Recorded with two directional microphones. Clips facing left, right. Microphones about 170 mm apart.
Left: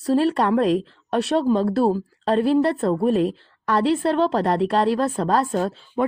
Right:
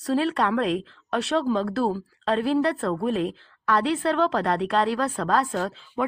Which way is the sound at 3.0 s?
40° left (ahead or behind).